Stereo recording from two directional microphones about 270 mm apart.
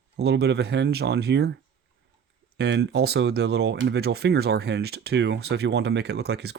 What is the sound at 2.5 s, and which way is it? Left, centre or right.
Speech, right.